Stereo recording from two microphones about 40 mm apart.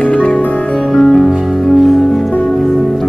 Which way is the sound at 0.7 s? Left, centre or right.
Centre.